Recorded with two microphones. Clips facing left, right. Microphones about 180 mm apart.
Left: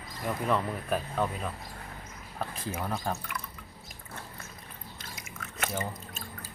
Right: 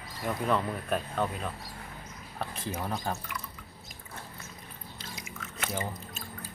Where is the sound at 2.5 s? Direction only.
Centre (ahead or behind).